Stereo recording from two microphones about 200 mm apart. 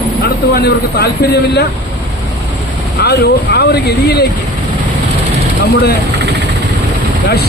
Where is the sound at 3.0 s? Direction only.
55° left (ahead or behind).